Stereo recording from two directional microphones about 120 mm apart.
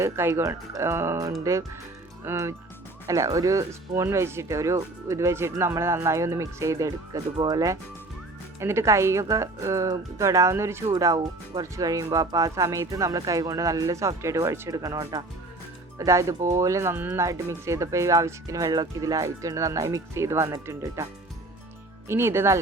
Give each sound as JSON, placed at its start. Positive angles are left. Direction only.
{"t": 0.0, "sound": "speech", "side_deg": -20}
{"t": 22.1, "sound": "speech", "side_deg": -20}